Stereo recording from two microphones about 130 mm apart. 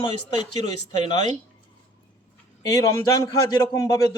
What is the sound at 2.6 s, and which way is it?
A man's voice, 25° left (ahead or behind).